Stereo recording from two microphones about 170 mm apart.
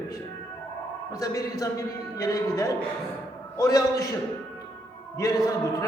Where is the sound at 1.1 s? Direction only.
20° left (ahead or behind).